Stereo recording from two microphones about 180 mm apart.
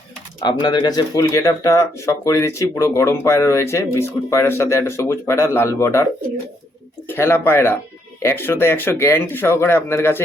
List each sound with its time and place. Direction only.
0.3 s speech: 25° left (ahead or behind)
7.1 s speech: 10° left (ahead or behind)